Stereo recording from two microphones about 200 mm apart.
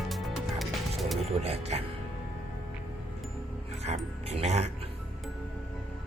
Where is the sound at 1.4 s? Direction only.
30° right (ahead or behind).